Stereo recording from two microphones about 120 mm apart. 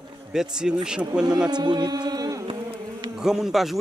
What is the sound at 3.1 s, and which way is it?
Speech, 5° right (ahead or behind).